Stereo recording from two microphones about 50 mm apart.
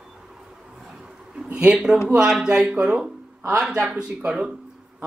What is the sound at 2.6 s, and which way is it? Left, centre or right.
Speech, right.